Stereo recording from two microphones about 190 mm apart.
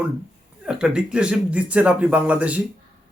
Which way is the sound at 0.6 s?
5° right (ahead or behind).